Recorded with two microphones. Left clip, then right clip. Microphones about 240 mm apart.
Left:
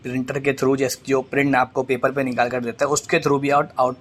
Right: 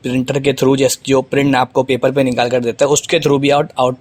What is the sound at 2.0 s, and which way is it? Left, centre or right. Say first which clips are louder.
Speech: right 6 dB; right.